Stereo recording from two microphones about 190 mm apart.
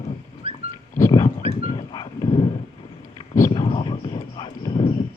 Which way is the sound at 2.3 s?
30° left (ahead or behind).